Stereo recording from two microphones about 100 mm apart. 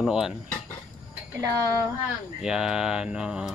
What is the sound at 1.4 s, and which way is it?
Speech, 35° right (ahead or behind).